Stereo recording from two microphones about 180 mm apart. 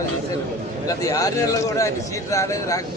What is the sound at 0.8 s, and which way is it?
A man's voice, 20° left (ahead or behind).